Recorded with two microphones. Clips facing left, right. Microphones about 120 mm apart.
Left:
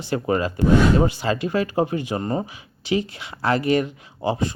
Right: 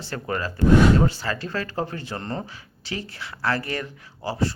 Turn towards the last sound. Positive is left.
turn(degrees=20)  # may be behind; listen again after turning